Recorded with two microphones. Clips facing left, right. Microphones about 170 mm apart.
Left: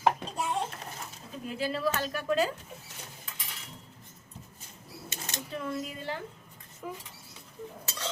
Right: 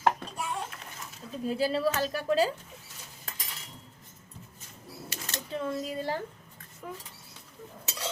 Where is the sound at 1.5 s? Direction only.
35° right (ahead or behind).